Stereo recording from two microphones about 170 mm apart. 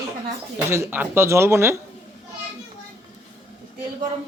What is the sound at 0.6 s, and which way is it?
Speech, 15° right (ahead or behind).